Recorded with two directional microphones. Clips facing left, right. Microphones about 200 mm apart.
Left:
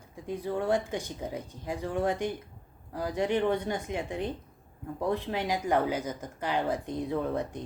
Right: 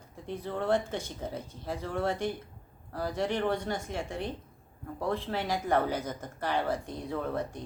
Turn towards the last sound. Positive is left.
turn(degrees=20)  # may be behind; listen again after turning